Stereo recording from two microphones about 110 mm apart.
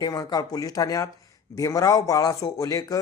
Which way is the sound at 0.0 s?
35° left (ahead or behind).